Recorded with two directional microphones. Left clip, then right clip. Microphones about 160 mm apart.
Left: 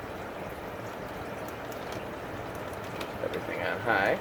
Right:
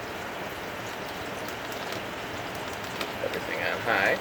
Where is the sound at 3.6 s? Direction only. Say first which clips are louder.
Right 1 dB; 30° left (ahead or behind).